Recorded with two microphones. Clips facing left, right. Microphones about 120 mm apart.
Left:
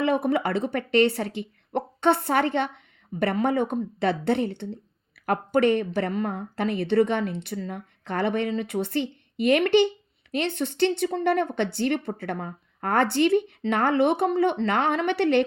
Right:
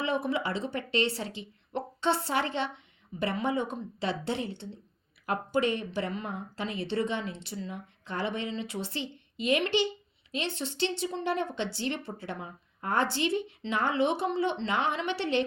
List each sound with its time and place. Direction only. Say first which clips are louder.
0.0 s speech: left 7 dB; 55° left (ahead or behind)